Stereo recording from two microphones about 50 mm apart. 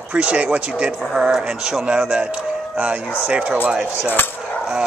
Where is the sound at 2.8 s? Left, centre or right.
Right.